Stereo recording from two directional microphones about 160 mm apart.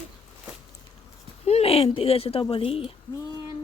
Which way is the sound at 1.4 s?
40° left (ahead or behind).